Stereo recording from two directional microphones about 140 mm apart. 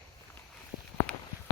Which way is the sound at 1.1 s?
5° left (ahead or behind).